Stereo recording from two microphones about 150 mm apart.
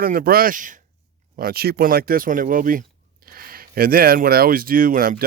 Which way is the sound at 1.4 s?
85° right.